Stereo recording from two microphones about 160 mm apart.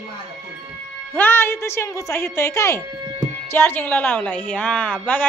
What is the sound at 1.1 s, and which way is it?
A woman's voice, 15° left (ahead or behind).